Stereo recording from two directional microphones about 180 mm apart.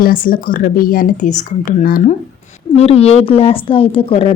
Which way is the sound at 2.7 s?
35° left (ahead or behind).